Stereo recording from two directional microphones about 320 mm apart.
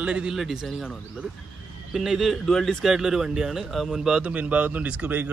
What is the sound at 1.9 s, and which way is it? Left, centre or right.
Speech, centre.